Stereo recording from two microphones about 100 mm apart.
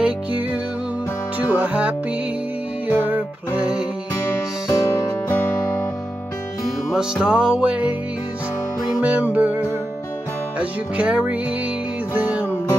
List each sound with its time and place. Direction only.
1.5 s music: 15° right (ahead or behind)
4.6 s music: 30° left (ahead or behind)
5.3 s music: 20° left (ahead or behind)
6.9 s music: 5° right (ahead or behind)
9.0 s music: 15° right (ahead or behind)
10.6 s music: 10° right (ahead or behind)